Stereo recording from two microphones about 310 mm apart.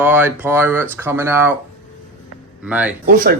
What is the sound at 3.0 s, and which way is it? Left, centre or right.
Speech, right.